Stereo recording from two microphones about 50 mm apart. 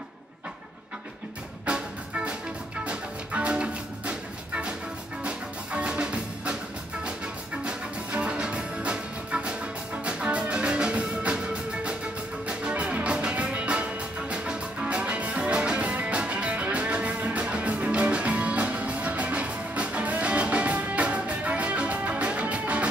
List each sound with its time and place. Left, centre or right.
1.7 s music: centre